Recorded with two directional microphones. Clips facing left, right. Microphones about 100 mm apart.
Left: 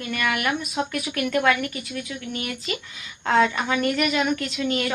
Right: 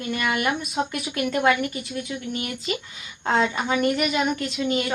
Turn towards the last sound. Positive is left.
turn(degrees=-20)  # may be behind; listen again after turning